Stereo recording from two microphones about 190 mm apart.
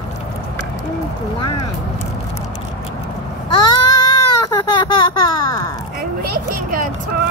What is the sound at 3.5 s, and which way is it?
Baby cry, 25° left (ahead or behind).